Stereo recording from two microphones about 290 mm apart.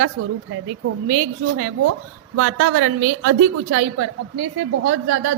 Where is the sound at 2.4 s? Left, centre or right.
Right.